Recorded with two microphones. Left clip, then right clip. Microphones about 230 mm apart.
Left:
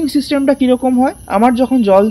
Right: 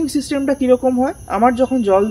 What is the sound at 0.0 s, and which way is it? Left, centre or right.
Speech, left.